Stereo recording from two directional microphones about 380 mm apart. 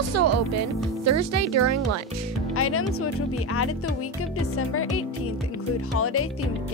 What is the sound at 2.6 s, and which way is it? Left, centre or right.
Speech, left.